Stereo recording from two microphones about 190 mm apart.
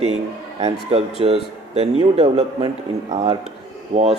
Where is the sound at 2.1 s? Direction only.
30° right (ahead or behind).